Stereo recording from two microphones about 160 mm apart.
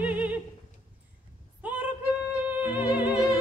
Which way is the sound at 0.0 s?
10° right (ahead or behind).